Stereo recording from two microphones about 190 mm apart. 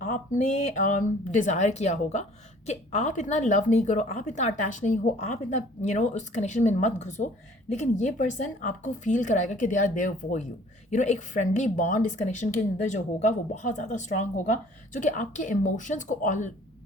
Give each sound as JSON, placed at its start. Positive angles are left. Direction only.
{"t": 0.0, "sound": "a woman's voice", "side_deg": 40}